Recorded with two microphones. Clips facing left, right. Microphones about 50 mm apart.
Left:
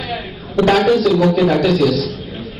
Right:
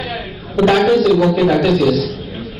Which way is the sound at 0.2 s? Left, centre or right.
Centre.